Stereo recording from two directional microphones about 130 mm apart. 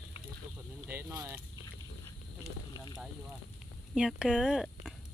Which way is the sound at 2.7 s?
30° left (ahead or behind).